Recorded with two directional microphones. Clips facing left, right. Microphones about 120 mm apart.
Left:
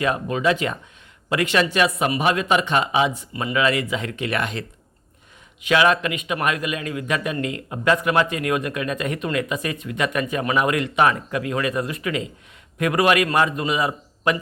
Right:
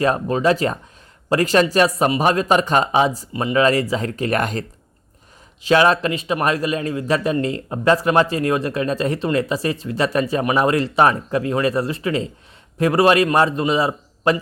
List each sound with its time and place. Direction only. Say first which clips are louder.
0.0 s a man's voice: right 3 dB; 35° right (ahead or behind)
5.6 s a man's voice: right 3 dB; 35° right (ahead or behind)